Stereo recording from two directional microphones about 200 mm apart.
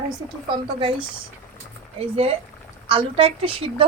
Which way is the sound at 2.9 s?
25° right (ahead or behind).